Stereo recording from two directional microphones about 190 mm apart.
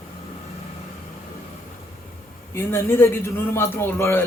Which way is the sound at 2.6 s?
10° left (ahead or behind).